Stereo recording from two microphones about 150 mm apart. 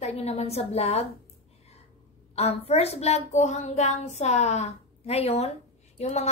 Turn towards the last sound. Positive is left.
turn(degrees=50)  # may be behind; listen again after turning